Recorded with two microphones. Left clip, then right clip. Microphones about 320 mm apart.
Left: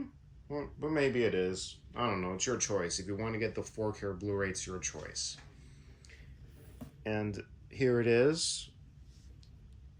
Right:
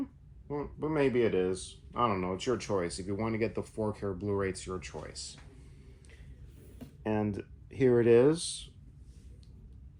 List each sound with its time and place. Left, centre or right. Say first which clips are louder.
0.4 s speech: right 2 dB; centre
7.0 s speech: right 4 dB; centre